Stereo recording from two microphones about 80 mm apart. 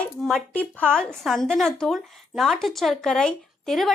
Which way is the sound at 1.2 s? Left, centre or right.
Centre.